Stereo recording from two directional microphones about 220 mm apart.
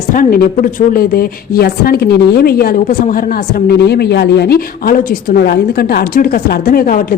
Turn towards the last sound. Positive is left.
turn(degrees=40)  # may be behind; listen again after turning